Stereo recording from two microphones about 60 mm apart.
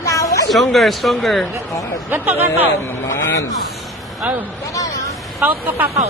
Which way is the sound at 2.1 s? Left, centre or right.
Right.